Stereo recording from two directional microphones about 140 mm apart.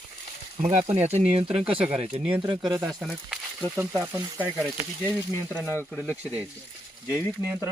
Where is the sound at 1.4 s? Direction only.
5° right (ahead or behind).